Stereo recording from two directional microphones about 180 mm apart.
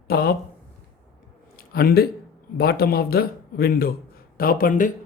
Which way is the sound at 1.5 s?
55° left (ahead or behind).